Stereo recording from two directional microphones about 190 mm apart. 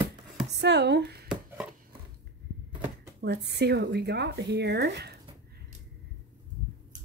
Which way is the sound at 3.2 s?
60° right (ahead or behind).